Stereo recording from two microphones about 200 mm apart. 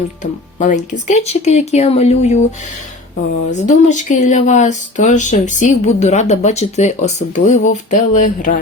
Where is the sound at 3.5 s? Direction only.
35° left (ahead or behind).